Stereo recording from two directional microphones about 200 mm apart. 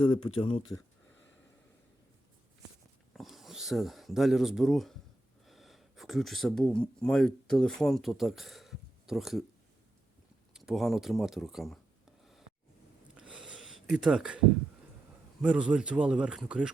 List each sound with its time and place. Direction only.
0.0 s speech: 25° left (ahead or behind)
3.1 s speech: centre (ahead or behind)
10.5 s speech: centre (ahead or behind)
13.1 s a sound: 5° right (ahead or behind)
15.4 s speech: 5° right (ahead or behind)